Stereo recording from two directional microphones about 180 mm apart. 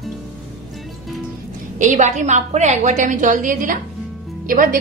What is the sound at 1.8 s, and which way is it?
A woman's voice, 40° right (ahead or behind).